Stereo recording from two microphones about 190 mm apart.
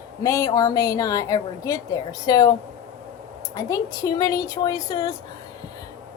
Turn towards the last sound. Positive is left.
turn(degrees=20)  # may be behind; listen again after turning